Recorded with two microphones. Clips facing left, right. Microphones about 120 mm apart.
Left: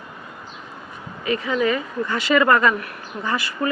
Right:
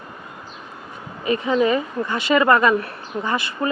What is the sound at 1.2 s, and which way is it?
Speech, 25° right (ahead or behind).